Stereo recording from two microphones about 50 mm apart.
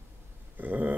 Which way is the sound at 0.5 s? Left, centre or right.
Right.